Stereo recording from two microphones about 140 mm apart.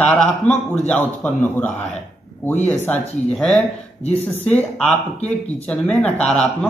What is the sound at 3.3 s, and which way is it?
Speech, 5° left (ahead or behind).